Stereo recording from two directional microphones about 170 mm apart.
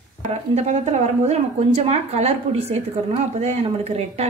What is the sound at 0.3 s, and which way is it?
A woman's voice, 40° right (ahead or behind).